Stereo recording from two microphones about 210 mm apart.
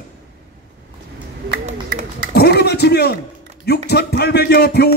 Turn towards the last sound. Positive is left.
turn(degrees=50)  # may be behind; listen again after turning